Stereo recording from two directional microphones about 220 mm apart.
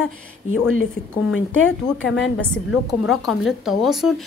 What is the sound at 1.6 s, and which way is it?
Speech, 60° left (ahead or behind).